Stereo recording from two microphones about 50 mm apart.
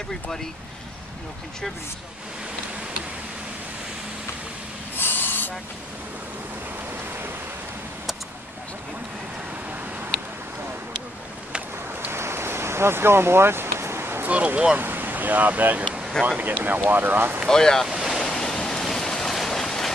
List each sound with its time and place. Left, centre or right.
4.9 s rub: left
12.1 s a sound: right
14.2 s speech: right
14.8 s speech: right
17.5 s speech: centre
18.2 s a sound: centre